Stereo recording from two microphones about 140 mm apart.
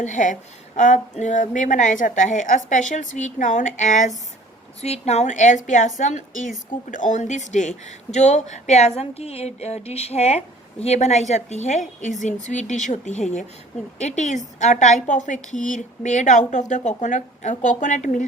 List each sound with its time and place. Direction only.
0.0 s a woman's voice: 60° left (ahead or behind)